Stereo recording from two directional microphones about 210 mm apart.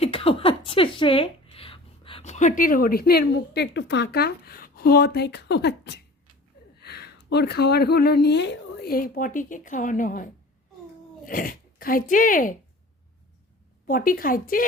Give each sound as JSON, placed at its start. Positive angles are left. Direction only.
{"t": 0.0, "sound": "speech", "side_deg": 25}
{"t": 11.3, "sound": "speech", "side_deg": 45}
{"t": 13.8, "sound": "speech", "side_deg": 40}